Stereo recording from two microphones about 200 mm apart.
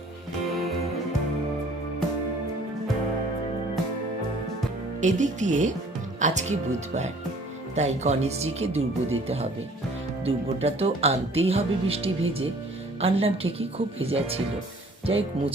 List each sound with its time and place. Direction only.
4.9 s a woman's voice: 40° right (ahead or behind)